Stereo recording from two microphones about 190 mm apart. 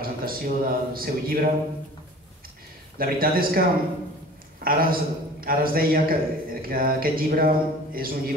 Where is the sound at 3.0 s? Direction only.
50° right (ahead or behind).